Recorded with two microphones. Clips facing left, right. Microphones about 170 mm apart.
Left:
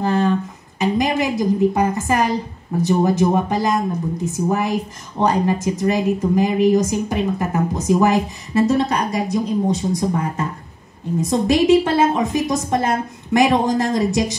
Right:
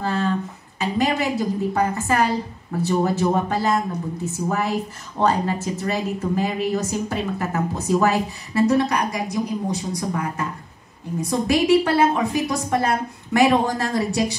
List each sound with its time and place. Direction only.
0.0 s a woman's voice: 15° left (ahead or behind)